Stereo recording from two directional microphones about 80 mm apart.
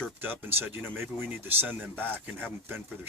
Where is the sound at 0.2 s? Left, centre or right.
Right.